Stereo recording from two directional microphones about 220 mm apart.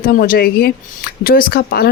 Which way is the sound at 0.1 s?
40° left (ahead or behind).